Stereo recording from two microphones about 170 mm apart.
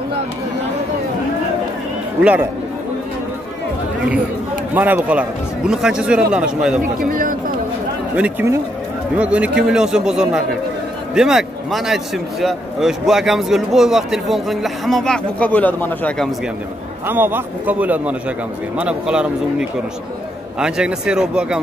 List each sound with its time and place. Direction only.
4.7 s a man's voice: 10° right (ahead or behind)
7.1 s speech: 55° right (ahead or behind)
8.2 s a man's voice: 10° right (ahead or behind); by 16.3 s 10° left (ahead or behind)
17.1 s a man's voice: 10° right (ahead or behind)
20.5 s a man's voice: 5° right (ahead or behind)